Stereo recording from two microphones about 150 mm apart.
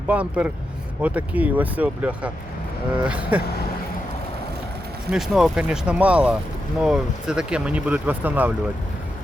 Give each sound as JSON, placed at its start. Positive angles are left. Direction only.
{"t": 0.1, "sound": "speech", "side_deg": -10}
{"t": 5.1, "sound": "speech", "side_deg": -5}